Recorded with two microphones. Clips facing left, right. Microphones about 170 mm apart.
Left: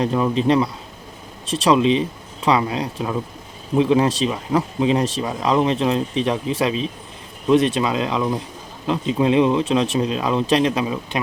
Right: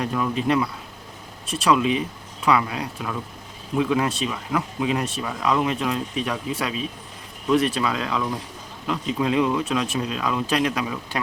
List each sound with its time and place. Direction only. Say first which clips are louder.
0.0 s speech: left 5 dB; 25° left (ahead or behind)